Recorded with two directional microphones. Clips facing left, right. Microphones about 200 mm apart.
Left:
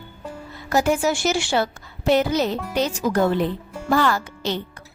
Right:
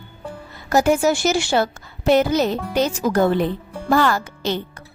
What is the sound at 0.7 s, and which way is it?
A woman's voice, 45° right (ahead or behind).